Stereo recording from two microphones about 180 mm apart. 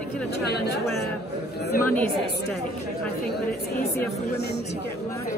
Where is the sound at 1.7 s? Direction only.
50° left (ahead or behind).